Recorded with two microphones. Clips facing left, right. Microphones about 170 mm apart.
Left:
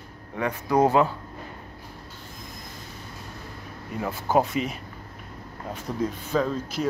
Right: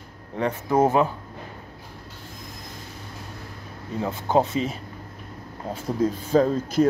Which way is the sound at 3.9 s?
20° right (ahead or behind).